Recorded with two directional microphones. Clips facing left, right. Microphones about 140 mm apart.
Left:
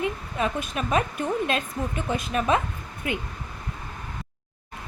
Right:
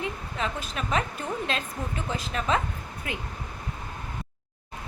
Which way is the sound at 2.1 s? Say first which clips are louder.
Left 4 dB; 20° left (ahead or behind).